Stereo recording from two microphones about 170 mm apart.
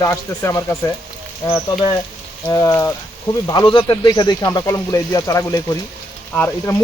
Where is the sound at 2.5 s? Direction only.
20° left (ahead or behind).